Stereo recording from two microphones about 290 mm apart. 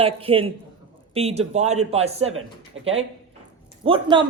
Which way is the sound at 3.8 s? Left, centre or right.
Centre.